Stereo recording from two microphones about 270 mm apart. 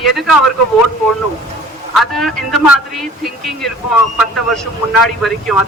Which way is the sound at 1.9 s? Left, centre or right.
Centre.